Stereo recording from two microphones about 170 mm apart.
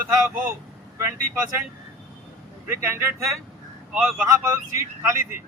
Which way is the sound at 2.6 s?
15° right (ahead or behind).